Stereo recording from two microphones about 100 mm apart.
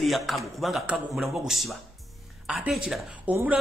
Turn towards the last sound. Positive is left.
turn(degrees=-10)  # may be behind; listen again after turning